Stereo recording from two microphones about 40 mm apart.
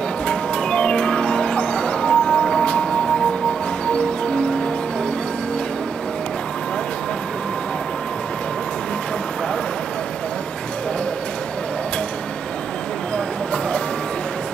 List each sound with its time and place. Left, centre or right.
0.3 s music: left